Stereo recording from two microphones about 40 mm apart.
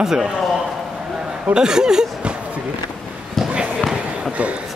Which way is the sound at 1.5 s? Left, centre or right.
Centre.